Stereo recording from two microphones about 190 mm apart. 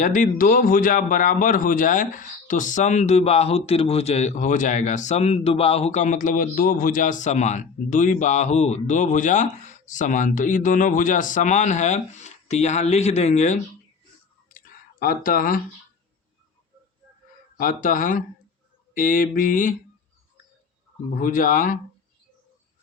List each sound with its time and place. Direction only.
0.0 s speech: 45° left (ahead or behind)
14.9 s mantra: 50° left (ahead or behind)
17.6 s mantra: 45° left (ahead or behind)
21.2 s mantra: 45° left (ahead or behind)